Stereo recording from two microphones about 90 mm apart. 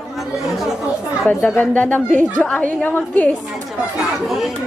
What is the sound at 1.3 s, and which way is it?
A woman's voice, 15° left (ahead or behind).